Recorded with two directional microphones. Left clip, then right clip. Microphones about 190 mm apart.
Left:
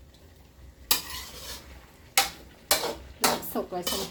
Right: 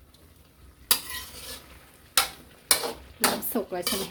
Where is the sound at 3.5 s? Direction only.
50° right (ahead or behind).